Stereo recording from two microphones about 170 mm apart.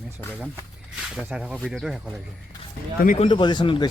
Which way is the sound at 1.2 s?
5° right (ahead or behind).